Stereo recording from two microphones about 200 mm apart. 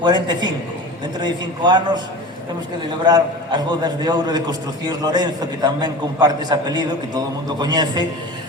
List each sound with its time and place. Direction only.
0.0 s a man's voice: 20° right (ahead or behind)
3.0 s a man's voice: 20° right (ahead or behind)